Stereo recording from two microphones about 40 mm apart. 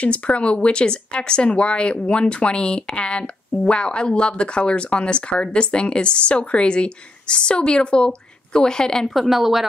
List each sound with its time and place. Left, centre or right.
0.0 s speech: left; by 9.1 s centre
9.1 s speech: centre